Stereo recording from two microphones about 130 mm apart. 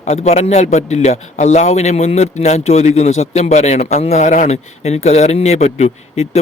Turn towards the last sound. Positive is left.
turn(degrees=55)  # may be behind; listen again after turning